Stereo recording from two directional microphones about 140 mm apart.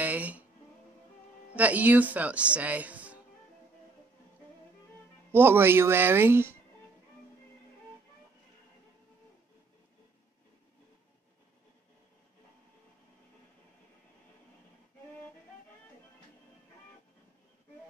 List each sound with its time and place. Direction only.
0.0 s music: 10° right (ahead or behind)
1.5 s speech: 10° right (ahead or behind)
5.3 s speech: 15° right (ahead or behind)